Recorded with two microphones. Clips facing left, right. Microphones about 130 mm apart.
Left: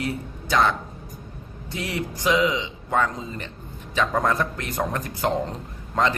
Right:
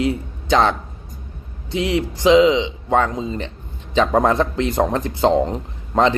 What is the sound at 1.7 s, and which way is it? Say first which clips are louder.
A man's voice: right 9 dB; 20° right (ahead or behind).